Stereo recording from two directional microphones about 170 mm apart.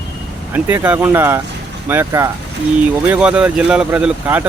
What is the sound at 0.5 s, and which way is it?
Speech, 10° right (ahead or behind).